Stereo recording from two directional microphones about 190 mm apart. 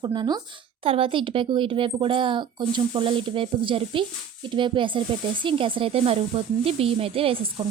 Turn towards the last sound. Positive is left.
turn(degrees=-30)  # may be behind; listen again after turning